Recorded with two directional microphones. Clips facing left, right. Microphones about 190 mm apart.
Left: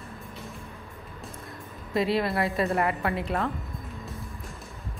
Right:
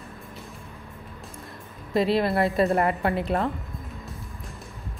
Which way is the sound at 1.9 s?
30° right (ahead or behind).